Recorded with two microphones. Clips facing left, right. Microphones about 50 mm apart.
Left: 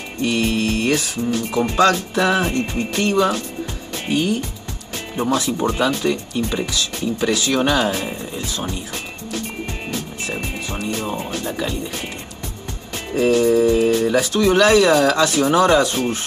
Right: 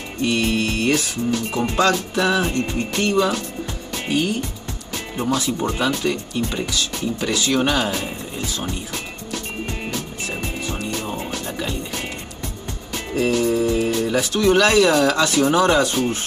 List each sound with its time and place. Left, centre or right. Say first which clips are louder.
0.3 s speech: left 1 dB; left
5.7 s speech: left 3 dB; left
10.7 s music: left 4 dB; left
11.3 s speech: left 3 dB; left
12.9 s speech: left 3 dB; left